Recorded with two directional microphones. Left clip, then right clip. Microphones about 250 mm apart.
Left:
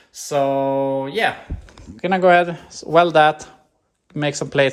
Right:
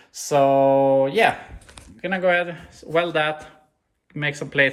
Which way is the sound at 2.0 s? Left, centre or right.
Left.